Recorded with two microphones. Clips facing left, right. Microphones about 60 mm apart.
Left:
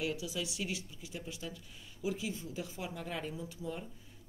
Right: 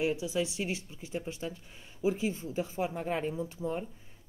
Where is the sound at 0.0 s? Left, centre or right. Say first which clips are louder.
Right 7 dB; right.